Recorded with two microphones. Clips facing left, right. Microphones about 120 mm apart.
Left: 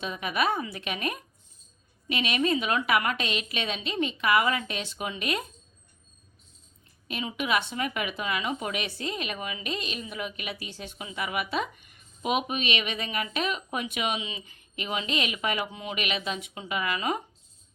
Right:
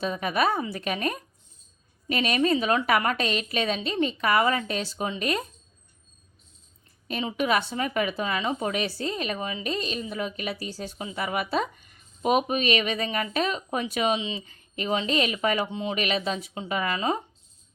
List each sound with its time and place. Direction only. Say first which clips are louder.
0.0 s a woman's voice: right 3 dB; 40° right (ahead or behind)
7.1 s a woman's voice: right 3 dB; 35° right (ahead or behind)